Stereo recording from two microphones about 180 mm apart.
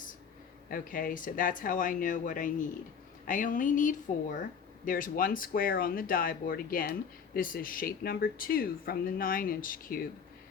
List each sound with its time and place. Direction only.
0.7 s speech: 50° left (ahead or behind)